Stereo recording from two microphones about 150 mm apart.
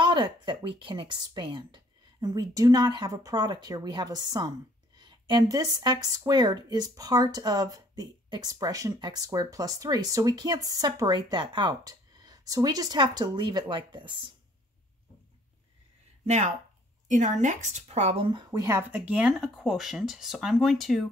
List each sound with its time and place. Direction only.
0.0 s speech: 30° right (ahead or behind)
16.3 s speech: 50° right (ahead or behind); by 18.8 s 25° right (ahead or behind)
18.8 s speech: 10° right (ahead or behind)